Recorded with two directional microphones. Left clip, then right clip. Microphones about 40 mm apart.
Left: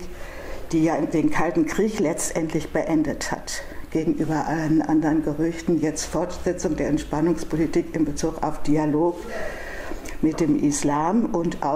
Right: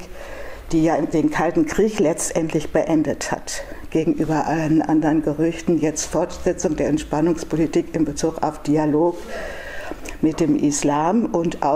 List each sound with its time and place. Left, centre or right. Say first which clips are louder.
0.7 s speech: right 3 dB; right
10.2 s speech: right 2 dB; right